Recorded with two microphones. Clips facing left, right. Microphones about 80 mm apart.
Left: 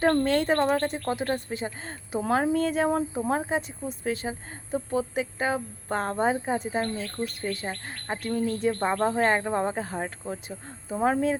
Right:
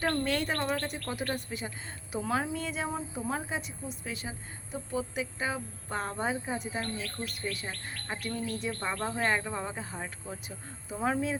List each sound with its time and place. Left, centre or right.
0.0 s speech: left
1.3 s speech: left